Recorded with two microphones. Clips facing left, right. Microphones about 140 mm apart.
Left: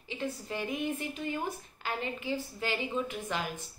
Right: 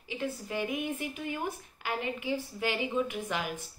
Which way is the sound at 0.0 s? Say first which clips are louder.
Right 1 dB; 10° right (ahead or behind).